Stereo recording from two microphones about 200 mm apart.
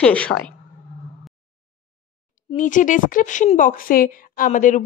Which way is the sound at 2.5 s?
40° left (ahead or behind).